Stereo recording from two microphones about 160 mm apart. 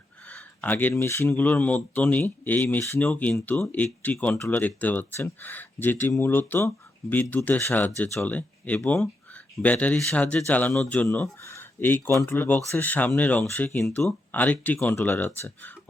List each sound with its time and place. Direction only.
0.3 s speech: 10° left (ahead or behind)